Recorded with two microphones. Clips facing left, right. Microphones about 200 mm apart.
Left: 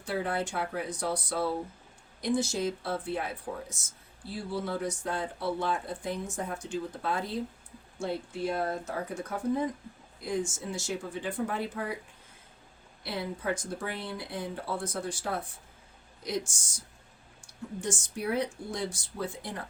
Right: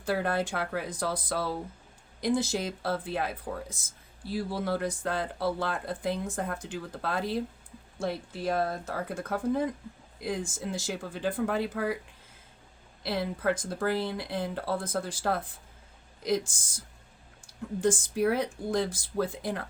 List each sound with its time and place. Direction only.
0.0 s speech: 90° right
13.0 s speech: 90° right